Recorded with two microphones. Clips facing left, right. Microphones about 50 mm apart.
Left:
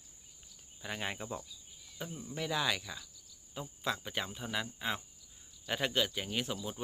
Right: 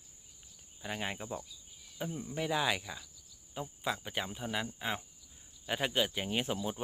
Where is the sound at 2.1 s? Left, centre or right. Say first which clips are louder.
Right 5 dB; right.